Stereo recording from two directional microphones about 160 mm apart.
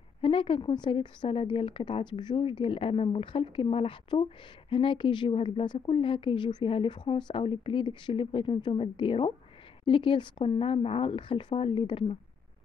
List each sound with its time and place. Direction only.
0.2 s a woman's voice: 35° left (ahead or behind)